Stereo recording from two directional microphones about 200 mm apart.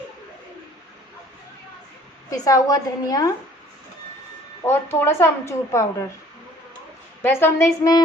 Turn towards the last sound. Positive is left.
turn(degrees=15)  # may be behind; listen again after turning